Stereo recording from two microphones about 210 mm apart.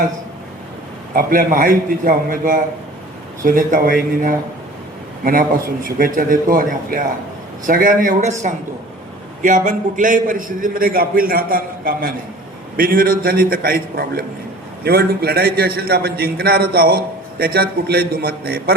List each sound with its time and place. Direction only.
1.1 s a man's voice: 40° right (ahead or behind)